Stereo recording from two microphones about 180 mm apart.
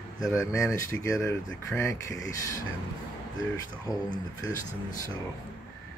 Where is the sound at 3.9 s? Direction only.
20° left (ahead or behind).